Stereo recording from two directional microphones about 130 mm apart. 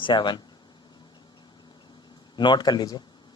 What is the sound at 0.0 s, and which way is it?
Speech, 35° left (ahead or behind).